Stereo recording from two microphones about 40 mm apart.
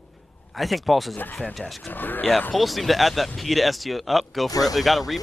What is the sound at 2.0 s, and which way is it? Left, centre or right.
Speech, left.